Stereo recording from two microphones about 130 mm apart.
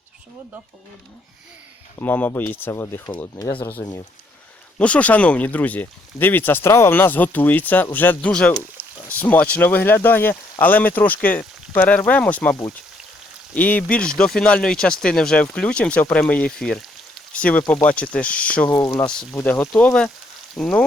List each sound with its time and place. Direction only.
2.0 s speech: 15° left (ahead or behind)
3.3 s speech: 35° left (ahead or behind)
4.8 s speech: 10° left (ahead or behind)
13.6 s speech: 10° left (ahead or behind)
18.7 s speech: 30° left (ahead or behind)
19.3 s speech: 15° left (ahead or behind)
20.6 s frying: 5° left (ahead or behind)